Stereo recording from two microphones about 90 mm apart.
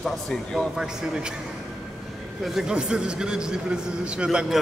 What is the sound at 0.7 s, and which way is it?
Speech, 10° right (ahead or behind).